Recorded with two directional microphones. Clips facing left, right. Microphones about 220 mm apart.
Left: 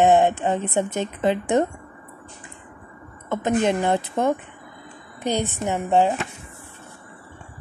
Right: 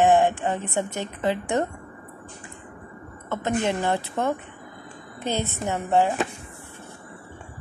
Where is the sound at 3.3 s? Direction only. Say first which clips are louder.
Left 4 dB; 15° left (ahead or behind).